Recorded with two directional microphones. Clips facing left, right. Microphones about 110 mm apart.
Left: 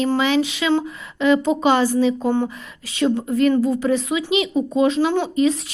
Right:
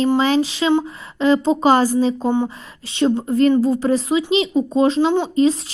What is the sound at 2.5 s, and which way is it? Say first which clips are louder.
A woman's voice: even; 30° right (ahead or behind).